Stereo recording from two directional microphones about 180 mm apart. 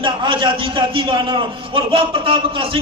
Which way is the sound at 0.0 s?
30° right (ahead or behind).